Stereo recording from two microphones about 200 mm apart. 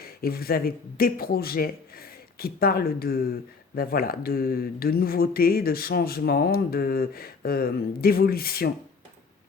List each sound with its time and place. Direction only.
0.0 s speech: 50° left (ahead or behind)